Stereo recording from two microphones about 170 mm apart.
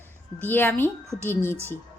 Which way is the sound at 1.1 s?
15° right (ahead or behind).